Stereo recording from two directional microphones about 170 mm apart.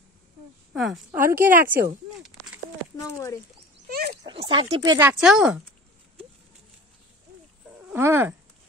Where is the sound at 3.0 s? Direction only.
20° left (ahead or behind).